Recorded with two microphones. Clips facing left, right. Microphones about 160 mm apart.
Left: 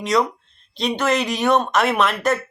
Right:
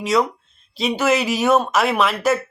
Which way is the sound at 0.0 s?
Centre (ahead or behind).